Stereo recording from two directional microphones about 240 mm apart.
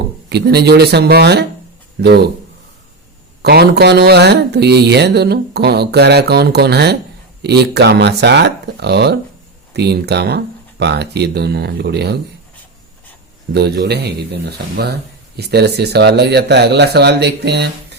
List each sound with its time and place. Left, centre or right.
0.3 s speech: right
3.4 s speech: right
13.5 s speech: right